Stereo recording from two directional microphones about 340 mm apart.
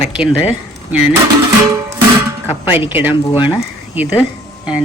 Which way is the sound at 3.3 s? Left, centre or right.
Centre.